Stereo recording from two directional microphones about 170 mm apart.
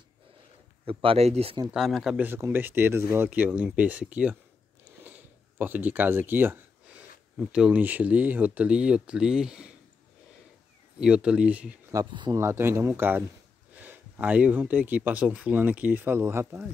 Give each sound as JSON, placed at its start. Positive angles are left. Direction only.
{"t": 0.8, "sound": "speech", "side_deg": -35}
{"t": 1.7, "sound": "speech", "side_deg": 0}
{"t": 5.6, "sound": "speech", "side_deg": -10}
{"t": 11.0, "sound": "speech", "side_deg": -5}
{"t": 11.9, "sound": "speech", "side_deg": -25}
{"t": 12.4, "sound": "speech", "side_deg": -15}